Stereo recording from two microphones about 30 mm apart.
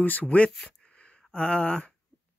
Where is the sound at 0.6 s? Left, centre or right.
Left.